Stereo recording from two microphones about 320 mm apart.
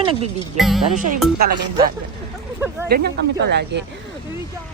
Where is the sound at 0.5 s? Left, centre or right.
Centre.